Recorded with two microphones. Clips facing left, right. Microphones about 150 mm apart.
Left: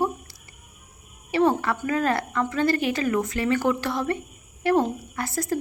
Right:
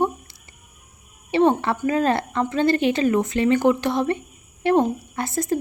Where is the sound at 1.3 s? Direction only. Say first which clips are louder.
Right 3 dB; 25° right (ahead or behind).